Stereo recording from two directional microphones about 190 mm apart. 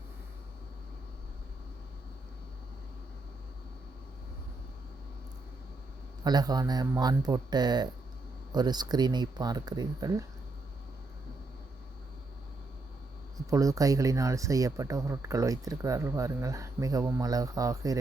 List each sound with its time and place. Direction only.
6.2 s speech: 20° right (ahead or behind)
13.5 s speech: 15° right (ahead or behind)